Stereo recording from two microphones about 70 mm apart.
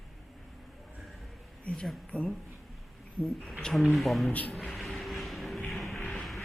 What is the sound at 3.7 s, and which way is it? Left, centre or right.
Speech, centre.